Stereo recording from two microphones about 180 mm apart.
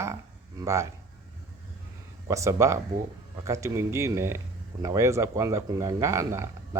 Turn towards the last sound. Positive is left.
turn(degrees=-15)  # may be behind; listen again after turning